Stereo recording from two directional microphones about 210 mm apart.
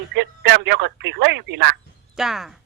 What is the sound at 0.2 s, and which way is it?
Speech, 55° right (ahead or behind).